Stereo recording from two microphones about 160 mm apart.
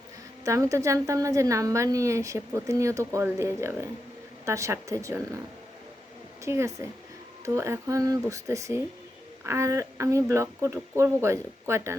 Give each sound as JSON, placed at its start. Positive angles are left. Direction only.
{"t": 0.4, "sound": "a woman's voice", "side_deg": -20}
{"t": 6.4, "sound": "a woman's voice", "side_deg": -15}